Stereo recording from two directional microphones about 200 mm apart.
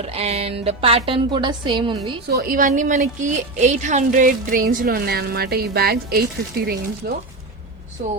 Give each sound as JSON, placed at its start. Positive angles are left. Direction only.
{"t": 0.0, "sound": "a woman's voice", "side_deg": -30}
{"t": 2.2, "sound": "a woman's voice", "side_deg": -50}